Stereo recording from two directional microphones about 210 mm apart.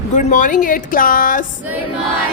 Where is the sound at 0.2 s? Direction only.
35° left (ahead or behind).